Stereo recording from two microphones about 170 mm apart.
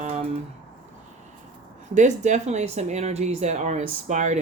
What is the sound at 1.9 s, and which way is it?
A woman's voice, 45° right (ahead or behind).